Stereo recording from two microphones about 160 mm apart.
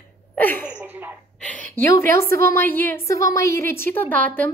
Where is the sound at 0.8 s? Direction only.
10° right (ahead or behind).